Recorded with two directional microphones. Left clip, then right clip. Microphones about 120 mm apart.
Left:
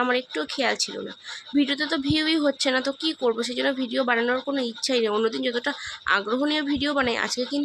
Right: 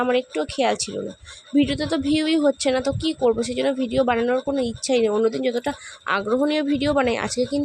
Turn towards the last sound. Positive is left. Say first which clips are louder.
# right 3 dB
turn(degrees=-45)  # may be behind; listen again after turning